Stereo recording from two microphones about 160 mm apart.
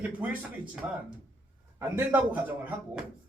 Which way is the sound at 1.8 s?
15° right (ahead or behind).